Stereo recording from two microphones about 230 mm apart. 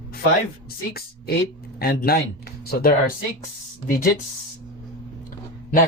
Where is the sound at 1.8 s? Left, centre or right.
Left.